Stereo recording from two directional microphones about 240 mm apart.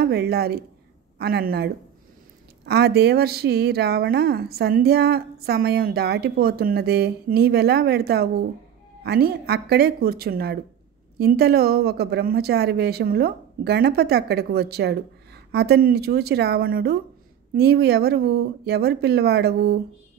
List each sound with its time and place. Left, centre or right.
0.0 s speech: right